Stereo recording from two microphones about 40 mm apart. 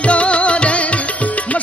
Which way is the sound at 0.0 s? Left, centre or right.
Left.